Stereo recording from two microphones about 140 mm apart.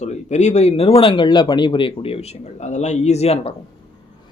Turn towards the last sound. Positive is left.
turn(degrees=45)  # may be behind; listen again after turning